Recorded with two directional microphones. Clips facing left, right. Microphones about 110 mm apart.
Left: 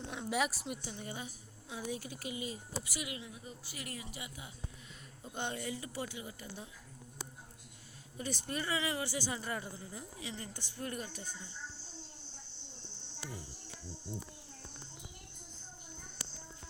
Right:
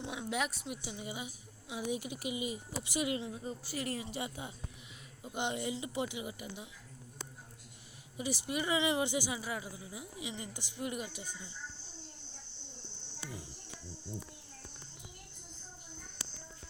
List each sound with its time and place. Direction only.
0.0 s a sound: 5° right (ahead or behind)
0.8 s speech: 10° right (ahead or behind); by 4.5 s 30° right (ahead or behind)
5.2 s speech: 15° right (ahead or behind)
8.2 s speech: 10° right (ahead or behind)